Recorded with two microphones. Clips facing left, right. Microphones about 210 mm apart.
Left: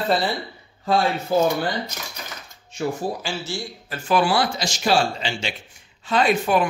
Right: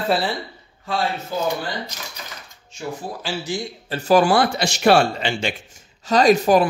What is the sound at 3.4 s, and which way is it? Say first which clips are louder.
Speech: right 4 dB; 20° right (ahead or behind).